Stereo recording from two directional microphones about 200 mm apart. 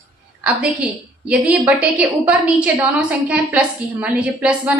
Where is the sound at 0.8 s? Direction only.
5° right (ahead or behind).